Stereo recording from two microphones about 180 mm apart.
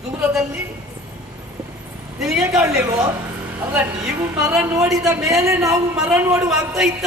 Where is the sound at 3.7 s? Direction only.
10° right (ahead or behind).